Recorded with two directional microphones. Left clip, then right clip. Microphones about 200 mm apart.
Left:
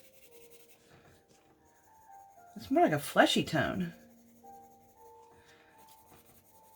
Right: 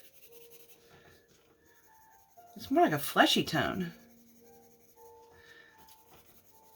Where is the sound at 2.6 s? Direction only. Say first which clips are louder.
Even; 25° left (ahead or behind).